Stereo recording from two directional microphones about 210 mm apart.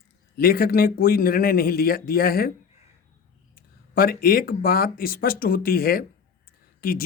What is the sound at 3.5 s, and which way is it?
Speech, 45° left (ahead or behind).